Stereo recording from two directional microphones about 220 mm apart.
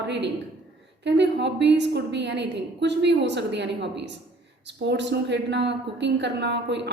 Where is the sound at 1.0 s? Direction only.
50° right (ahead or behind).